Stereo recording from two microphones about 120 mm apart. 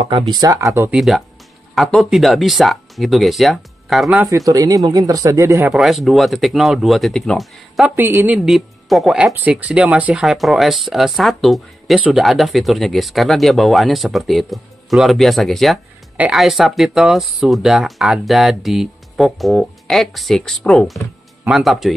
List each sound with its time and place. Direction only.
0.3 s speech: 30° right (ahead or behind)
0.9 s speech: centre (ahead or behind)
4.5 s speech: 30° right (ahead or behind)
5.7 s speech: centre (ahead or behind)
7.8 s a woman's voice: 15° right (ahead or behind)
8.4 s speech: centre (ahead or behind)